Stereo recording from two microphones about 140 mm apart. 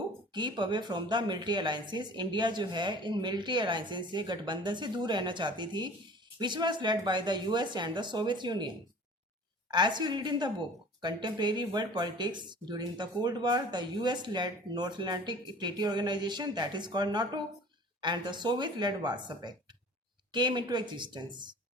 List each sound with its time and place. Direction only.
0.3 s speech: 30° right (ahead or behind)